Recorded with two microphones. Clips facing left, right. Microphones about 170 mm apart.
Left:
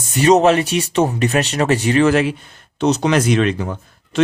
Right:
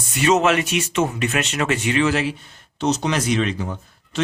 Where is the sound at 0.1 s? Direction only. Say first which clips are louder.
Left 5 dB; 35° left (ahead or behind).